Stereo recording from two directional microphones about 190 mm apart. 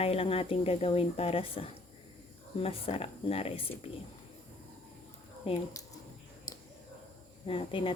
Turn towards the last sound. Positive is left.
turn(degrees=25)  # may be behind; listen again after turning